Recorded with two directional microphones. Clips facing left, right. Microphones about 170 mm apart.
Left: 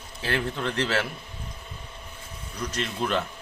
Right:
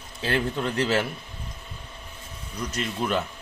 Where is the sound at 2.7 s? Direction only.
5° right (ahead or behind).